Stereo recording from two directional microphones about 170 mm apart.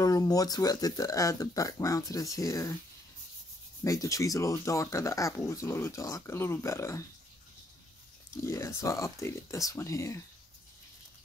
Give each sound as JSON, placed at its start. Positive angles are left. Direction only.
{"t": 0.0, "sound": "speech", "side_deg": 20}
{"t": 3.8, "sound": "speech", "side_deg": 20}
{"t": 8.5, "sound": "speech", "side_deg": 15}